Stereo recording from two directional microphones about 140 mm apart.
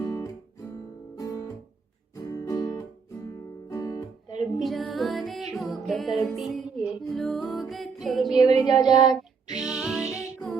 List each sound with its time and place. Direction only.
0.0 s guitar: 25° left (ahead or behind)
2.3 s music: 25° left (ahead or behind)
4.4 s music: centre (ahead or behind)
8.5 s child singing: 30° left (ahead or behind)
9.6 s music: 5° right (ahead or behind)